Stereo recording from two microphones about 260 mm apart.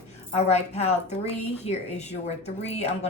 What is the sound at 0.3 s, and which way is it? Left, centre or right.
Speech, left.